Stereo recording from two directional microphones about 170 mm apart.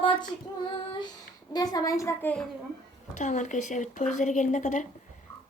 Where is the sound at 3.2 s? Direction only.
45° left (ahead or behind).